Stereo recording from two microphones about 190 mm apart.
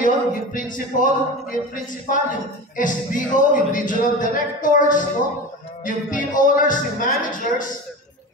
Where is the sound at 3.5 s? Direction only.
45° left (ahead or behind).